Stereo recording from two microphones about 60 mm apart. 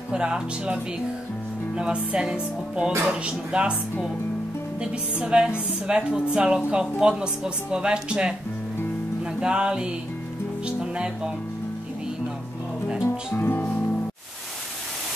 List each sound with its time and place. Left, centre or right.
0.1 s speech: centre
1.8 s speech: centre
5.2 s speech: centre
9.4 s speech: centre
12.8 s music: centre
13.3 s music: left